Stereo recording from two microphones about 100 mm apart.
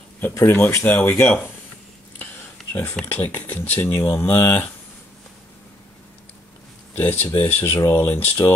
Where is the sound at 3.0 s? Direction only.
20° left (ahead or behind).